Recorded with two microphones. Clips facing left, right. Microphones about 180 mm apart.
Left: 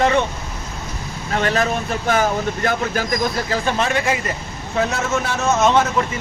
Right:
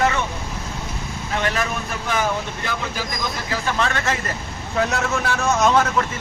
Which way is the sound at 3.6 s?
20° left (ahead or behind).